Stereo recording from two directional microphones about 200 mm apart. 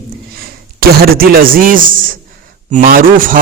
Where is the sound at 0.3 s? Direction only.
50° right (ahead or behind).